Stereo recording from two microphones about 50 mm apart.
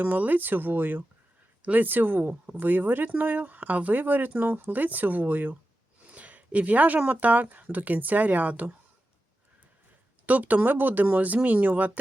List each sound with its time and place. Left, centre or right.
0.0 s speech: right
6.1 s a sound: right
7.0 s speech: right
10.2 s speech: right